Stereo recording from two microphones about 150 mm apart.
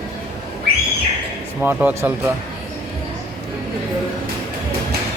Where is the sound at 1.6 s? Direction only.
10° right (ahead or behind).